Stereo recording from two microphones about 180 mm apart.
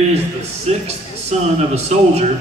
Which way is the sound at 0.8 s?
35° right (ahead or behind).